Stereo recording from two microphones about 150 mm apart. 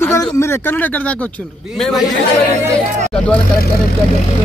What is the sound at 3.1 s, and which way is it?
Speech, 10° left (ahead or behind).